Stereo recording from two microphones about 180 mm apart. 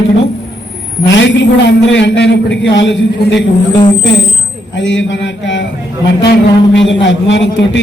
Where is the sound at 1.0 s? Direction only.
90° left.